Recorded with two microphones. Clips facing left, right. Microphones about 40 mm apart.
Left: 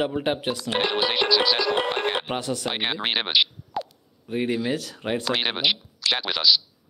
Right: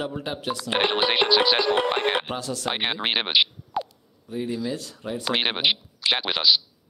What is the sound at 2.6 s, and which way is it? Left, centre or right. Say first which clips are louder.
Speech: even; centre.